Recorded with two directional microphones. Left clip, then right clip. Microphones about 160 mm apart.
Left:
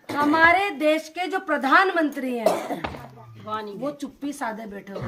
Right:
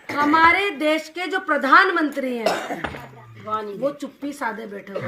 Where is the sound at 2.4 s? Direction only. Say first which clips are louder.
Left 2 dB; 15° left (ahead or behind).